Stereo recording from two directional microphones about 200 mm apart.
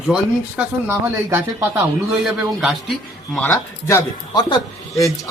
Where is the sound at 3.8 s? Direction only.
15° left (ahead or behind).